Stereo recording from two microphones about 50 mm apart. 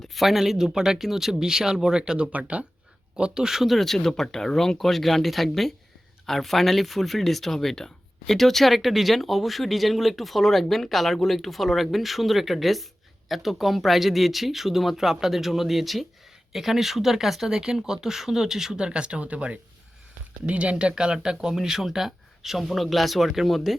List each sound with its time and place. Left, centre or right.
0.0 s speech: centre
2.5 s speech: right
3.4 s speech: centre